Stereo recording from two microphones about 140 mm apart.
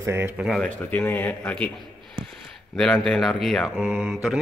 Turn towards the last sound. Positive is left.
turn(degrees=-5)  # may be behind; listen again after turning